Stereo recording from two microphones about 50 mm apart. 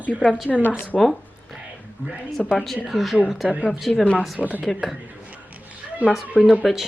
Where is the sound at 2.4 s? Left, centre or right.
Centre.